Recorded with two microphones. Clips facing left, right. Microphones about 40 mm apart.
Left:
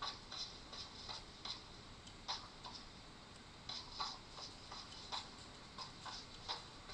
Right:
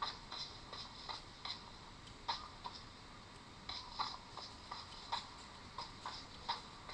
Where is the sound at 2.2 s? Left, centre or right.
Centre.